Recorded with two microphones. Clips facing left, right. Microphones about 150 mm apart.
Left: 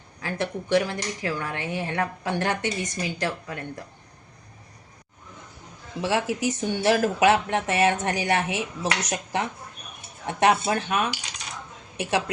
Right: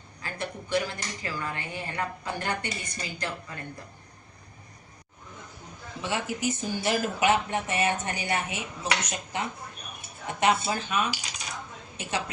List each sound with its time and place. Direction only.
0.2 s speech: 85° left
6.0 s speech: 90° left; by 11.1 s 70° left (ahead or behind)